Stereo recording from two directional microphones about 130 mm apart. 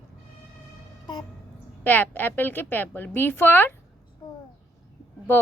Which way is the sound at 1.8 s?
15° left (ahead or behind).